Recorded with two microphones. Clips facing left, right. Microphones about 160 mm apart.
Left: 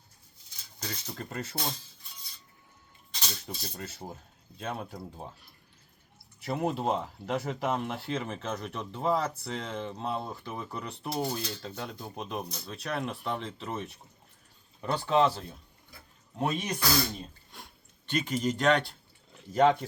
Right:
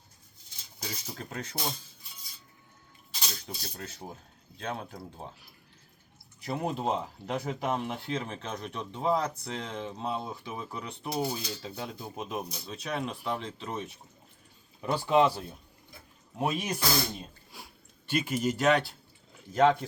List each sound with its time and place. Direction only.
0.8 s speech: 5° right (ahead or behind)
3.1 s speech: 5° right (ahead or behind)
16.8 s speech: 20° right (ahead or behind)
17.5 s a sound: 5° right (ahead or behind)